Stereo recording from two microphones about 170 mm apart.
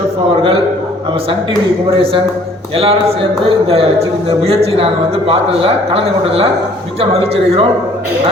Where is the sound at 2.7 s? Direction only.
35° right (ahead or behind).